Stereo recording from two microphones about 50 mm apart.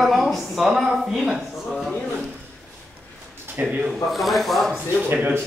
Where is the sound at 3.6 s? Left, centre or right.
Right.